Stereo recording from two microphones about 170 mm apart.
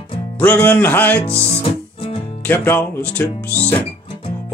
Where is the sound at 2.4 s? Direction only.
10° left (ahead or behind).